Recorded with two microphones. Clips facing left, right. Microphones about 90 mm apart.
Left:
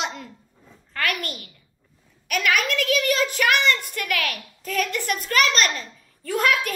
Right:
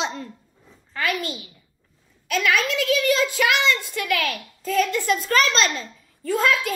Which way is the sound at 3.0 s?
20° right (ahead or behind).